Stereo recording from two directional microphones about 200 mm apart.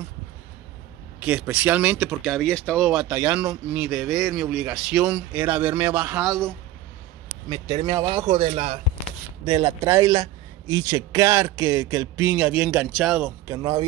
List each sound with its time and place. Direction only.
1.2 s speech: 5° right (ahead or behind)
7.4 s speech: 20° right (ahead or behind)
9.8 s speech: 15° right (ahead or behind)
13.6 s speech: 20° right (ahead or behind)